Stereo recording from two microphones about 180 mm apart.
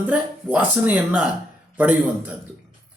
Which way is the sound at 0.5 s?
10° right (ahead or behind).